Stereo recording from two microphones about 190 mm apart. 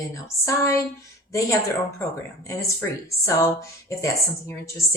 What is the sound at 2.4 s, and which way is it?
A woman's voice, 15° left (ahead or behind).